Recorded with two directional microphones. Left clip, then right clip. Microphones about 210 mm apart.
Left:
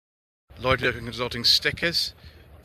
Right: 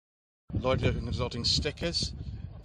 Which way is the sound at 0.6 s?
Centre (ahead or behind).